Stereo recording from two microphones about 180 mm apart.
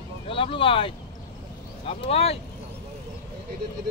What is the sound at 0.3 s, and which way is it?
Speech, 30° left (ahead or behind).